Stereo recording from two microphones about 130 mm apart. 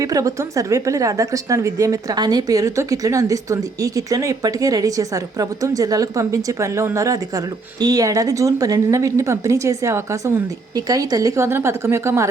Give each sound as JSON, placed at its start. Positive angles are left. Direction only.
{"t": 0.0, "sound": "a woman's voice", "side_deg": -25}